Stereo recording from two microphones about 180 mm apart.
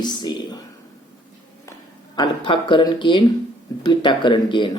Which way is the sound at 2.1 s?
25° left (ahead or behind).